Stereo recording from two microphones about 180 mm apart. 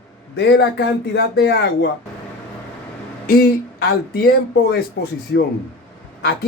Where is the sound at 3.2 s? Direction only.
60° left (ahead or behind).